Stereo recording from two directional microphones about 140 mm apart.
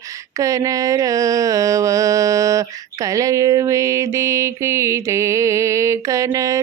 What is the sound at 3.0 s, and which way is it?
Mantra, 25° right (ahead or behind).